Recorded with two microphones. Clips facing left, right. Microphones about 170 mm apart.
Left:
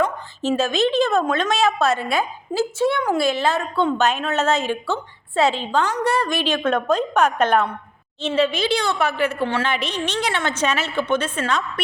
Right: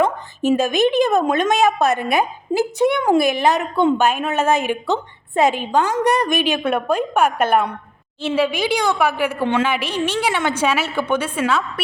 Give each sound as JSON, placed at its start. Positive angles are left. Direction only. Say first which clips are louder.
{"t": 0.4, "sound": "a woman's voice", "louder": "right 3 dB", "side_deg": -15}